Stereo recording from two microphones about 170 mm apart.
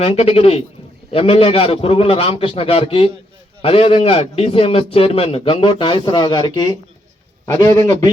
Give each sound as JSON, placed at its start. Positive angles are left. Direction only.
{"t": 0.0, "sound": "a man's voice", "side_deg": 35}